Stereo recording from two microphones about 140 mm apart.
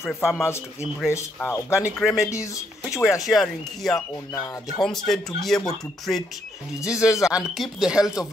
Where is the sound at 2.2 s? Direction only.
20° left (ahead or behind).